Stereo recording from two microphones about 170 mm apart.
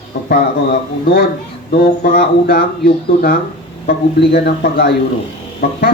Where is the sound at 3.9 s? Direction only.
75° left (ahead or behind).